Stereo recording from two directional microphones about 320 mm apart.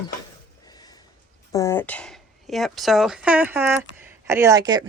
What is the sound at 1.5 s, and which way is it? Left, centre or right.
Speech, centre.